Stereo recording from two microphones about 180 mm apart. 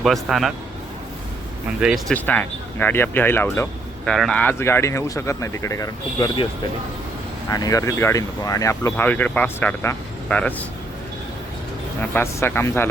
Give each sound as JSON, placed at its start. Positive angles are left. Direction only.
{"t": 0.0, "sound": "a man's voice", "side_deg": 0}
{"t": 1.8, "sound": "a man's voice", "side_deg": -5}
{"t": 2.1, "sound": "speech", "side_deg": 10}
{"t": 7.5, "sound": "speech", "side_deg": 20}
{"t": 12.1, "sound": "speech", "side_deg": 15}